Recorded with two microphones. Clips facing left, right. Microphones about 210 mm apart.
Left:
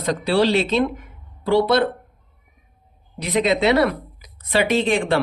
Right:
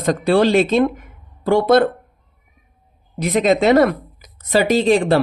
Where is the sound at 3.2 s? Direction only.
45° right (ahead or behind).